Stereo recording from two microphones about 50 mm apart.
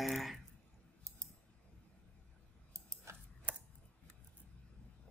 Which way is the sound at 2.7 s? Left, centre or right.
Right.